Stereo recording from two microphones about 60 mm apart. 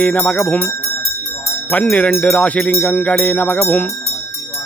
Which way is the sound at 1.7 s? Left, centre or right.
Left.